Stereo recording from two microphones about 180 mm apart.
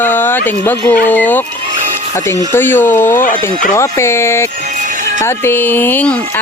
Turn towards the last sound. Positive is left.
turn(degrees=10)  # may be behind; listen again after turning